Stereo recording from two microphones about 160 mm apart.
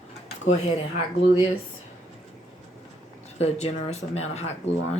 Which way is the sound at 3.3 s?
40° left (ahead or behind).